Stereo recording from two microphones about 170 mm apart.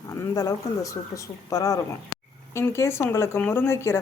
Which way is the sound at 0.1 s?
20° left (ahead or behind).